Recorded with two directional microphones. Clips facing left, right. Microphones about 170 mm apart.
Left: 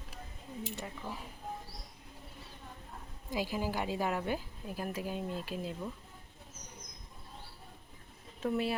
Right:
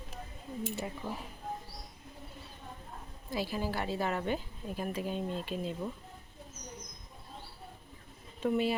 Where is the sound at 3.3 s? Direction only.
15° left (ahead or behind).